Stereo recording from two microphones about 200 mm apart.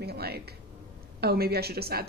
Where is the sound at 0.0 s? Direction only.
50° right (ahead or behind).